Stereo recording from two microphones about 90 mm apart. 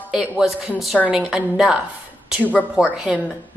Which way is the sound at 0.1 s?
5° right (ahead or behind).